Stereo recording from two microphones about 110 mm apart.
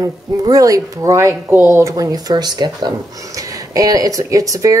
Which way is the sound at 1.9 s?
35° right (ahead or behind).